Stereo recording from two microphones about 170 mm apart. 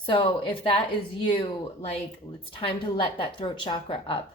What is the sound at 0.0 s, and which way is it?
A woman's voice, 30° left (ahead or behind).